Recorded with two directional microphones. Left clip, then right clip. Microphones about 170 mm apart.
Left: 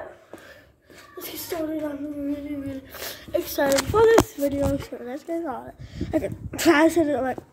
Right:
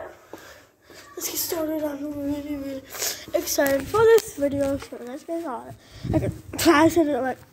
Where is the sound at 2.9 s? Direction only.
30° left (ahead or behind).